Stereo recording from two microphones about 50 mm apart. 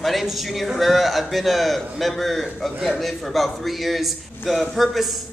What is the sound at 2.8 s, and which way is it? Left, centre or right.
A man's voice, centre.